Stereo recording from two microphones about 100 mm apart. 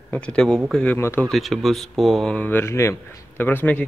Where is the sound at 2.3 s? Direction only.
15° left (ahead or behind).